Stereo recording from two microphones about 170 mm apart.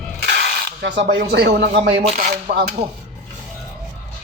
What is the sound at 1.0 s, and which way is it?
Speech, 75° right (ahead or behind).